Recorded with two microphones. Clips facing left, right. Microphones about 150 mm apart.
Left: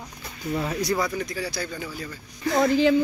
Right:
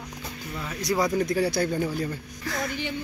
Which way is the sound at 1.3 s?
55° right (ahead or behind).